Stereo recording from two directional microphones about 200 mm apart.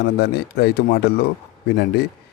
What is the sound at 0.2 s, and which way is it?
Speech, 50° left (ahead or behind).